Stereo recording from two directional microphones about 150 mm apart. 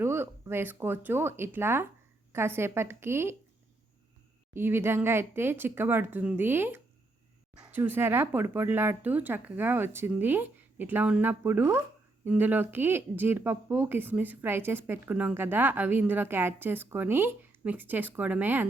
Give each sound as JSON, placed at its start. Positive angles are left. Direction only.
{"t": 0.0, "sound": "speech", "side_deg": -15}
{"t": 4.5, "sound": "speech", "side_deg": -15}